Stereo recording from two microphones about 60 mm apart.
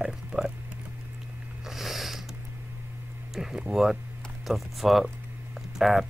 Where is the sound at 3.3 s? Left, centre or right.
Centre.